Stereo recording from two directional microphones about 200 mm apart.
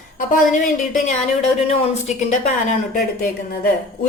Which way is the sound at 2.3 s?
40° left (ahead or behind).